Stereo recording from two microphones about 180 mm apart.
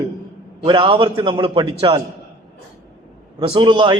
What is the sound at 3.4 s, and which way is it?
Speech, 30° right (ahead or behind).